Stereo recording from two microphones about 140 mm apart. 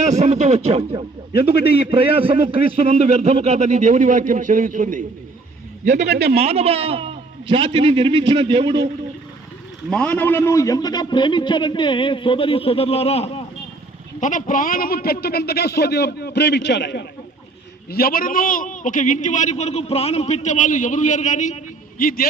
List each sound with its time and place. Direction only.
0.0 s a man's voice: 55° right (ahead or behind); by 5.0 s 70° right (ahead or behind)
5.8 s a man's voice: 55° right (ahead or behind); by 8.9 s 35° right (ahead or behind)
9.9 s a man's voice: 10° left (ahead or behind); by 13.4 s 45° left (ahead or behind)
14.2 s speech: 70° left (ahead or behind); by 15.4 s 90° left
17.9 s a man's voice: 90° left